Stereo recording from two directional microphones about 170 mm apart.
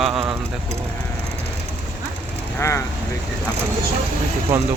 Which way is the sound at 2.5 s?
15° left (ahead or behind).